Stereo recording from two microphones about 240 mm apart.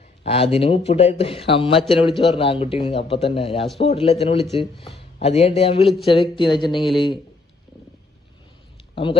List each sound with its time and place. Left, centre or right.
0.2 s a man's voice: left
6.7 s speech: centre